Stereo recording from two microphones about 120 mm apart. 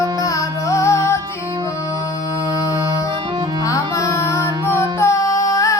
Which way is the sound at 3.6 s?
25° left (ahead or behind).